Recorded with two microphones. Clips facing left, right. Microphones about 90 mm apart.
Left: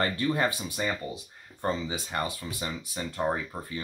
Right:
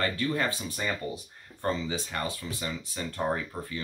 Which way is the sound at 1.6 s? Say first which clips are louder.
Even; 20° left (ahead or behind).